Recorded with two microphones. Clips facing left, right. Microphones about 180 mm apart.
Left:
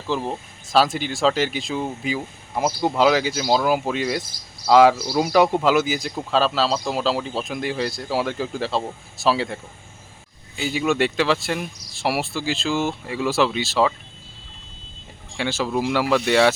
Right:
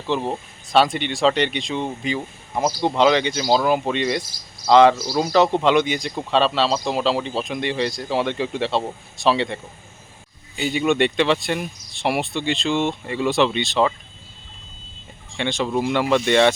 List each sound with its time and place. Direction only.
0.1 s speech: centre (ahead or behind)
10.6 s speech: centre (ahead or behind)
15.4 s speech: 5° left (ahead or behind)